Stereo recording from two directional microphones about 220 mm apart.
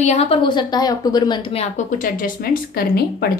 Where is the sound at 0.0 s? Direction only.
30° left (ahead or behind).